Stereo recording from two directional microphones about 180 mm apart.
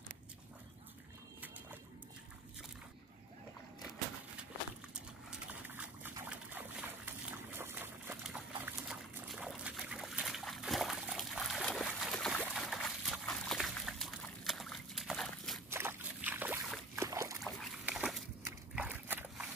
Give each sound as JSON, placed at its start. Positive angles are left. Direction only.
{"t": 5.3, "sound": "dog", "side_deg": -10}
{"t": 15.7, "sound": "boat", "side_deg": -15}
{"t": 17.4, "sound": "boat", "side_deg": 0}
{"t": 18.4, "sound": "a sound", "side_deg": -10}